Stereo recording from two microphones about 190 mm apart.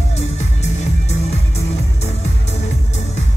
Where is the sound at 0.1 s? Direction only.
35° left (ahead or behind).